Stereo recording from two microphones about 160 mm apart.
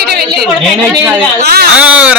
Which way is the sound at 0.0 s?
80° right.